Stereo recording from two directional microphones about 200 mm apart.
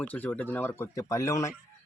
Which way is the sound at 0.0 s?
10° left (ahead or behind).